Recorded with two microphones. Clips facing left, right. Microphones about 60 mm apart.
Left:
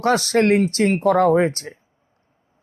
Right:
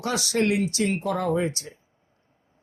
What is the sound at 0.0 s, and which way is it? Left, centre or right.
Speech, left.